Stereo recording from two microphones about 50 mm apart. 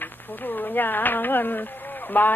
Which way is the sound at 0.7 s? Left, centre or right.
Left.